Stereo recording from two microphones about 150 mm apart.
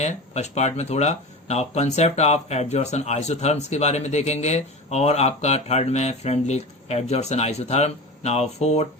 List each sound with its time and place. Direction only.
0.0 s speech: 50° left (ahead or behind)